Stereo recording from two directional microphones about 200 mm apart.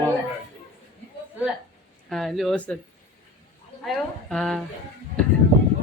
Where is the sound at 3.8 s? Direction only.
Centre (ahead or behind).